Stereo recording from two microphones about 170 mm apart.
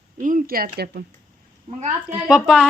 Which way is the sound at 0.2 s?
50° right (ahead or behind).